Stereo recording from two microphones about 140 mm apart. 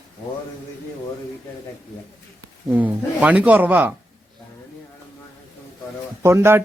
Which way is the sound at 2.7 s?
10° right (ahead or behind).